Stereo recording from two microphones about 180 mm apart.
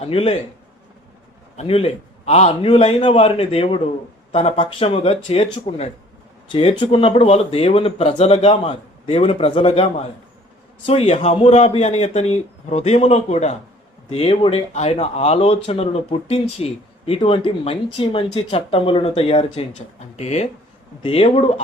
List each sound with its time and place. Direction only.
0.0 s speech: 35° left (ahead or behind)
1.5 s speech: 30° left (ahead or behind)